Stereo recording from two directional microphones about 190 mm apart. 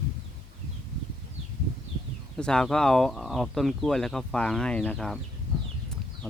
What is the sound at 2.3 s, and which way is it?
Speech, 5° left (ahead or behind).